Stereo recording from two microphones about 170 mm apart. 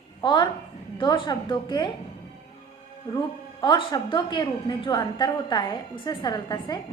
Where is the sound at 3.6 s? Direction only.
25° left (ahead or behind).